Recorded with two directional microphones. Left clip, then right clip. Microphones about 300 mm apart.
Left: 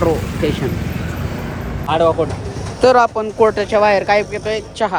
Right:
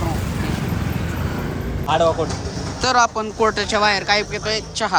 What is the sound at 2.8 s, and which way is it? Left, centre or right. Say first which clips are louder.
Speech: left 5 dB; centre.